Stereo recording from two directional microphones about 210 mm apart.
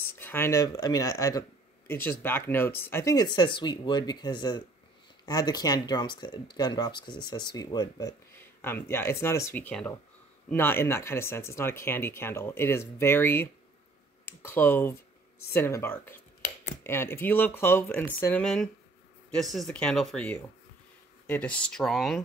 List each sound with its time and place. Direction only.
0.0 s speech: 10° left (ahead or behind)